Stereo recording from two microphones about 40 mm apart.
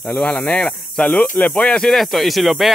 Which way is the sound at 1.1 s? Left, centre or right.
Left.